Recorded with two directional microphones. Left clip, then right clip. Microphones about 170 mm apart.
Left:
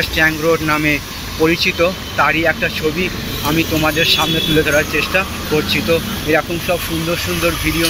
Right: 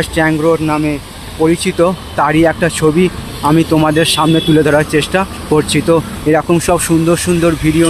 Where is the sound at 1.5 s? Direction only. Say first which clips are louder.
Right 2 dB; 45° right (ahead or behind).